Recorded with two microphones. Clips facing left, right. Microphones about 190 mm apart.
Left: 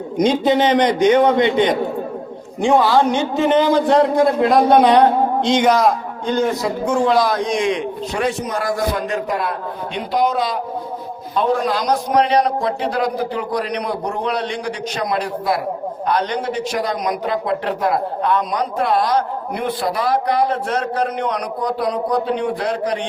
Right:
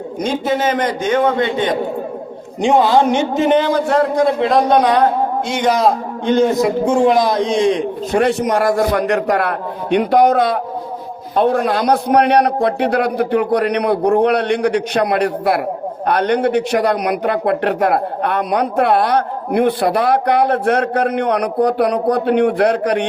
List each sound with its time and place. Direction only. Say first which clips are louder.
0.4 s a man's voice: left 1 dB; 20° left (ahead or behind)
2.6 s a man's voice: right 2 dB; 20° right (ahead or behind)
3.8 s a man's voice: left 1 dB; 20° left (ahead or behind)
4.2 s a man's voice: even; centre (ahead or behind)
5.8 s a man's voice: right 2 dB; 20° right (ahead or behind)
8.1 s a man's voice: right 7 dB; 65° right (ahead or behind)